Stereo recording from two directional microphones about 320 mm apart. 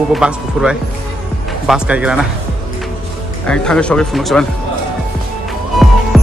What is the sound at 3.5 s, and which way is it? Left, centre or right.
Speech, centre.